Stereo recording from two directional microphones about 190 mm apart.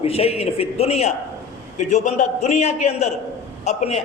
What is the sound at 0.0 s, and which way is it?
A man's voice, 30° left (ahead or behind).